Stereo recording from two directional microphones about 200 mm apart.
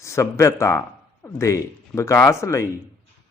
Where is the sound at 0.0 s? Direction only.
15° left (ahead or behind).